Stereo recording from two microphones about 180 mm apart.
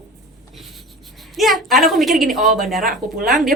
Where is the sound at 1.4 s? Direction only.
Centre (ahead or behind).